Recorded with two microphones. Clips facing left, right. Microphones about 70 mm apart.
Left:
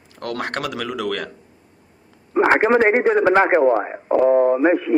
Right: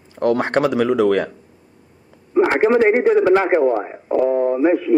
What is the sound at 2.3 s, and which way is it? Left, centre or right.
Speech, left.